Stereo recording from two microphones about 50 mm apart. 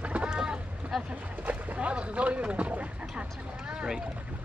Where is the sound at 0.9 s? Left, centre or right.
Centre.